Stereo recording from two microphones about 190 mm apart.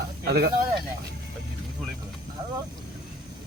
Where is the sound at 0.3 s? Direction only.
55° right (ahead or behind).